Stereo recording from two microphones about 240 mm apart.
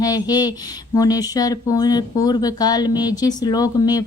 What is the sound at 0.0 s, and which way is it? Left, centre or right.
Speech, centre.